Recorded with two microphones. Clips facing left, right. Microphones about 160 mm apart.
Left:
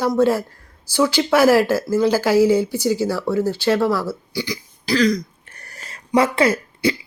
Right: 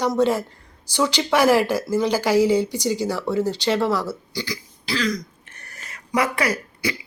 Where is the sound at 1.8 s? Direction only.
15° right (ahead or behind).